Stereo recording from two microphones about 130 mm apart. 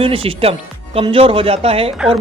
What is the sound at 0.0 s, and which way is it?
Speech, 45° right (ahead or behind).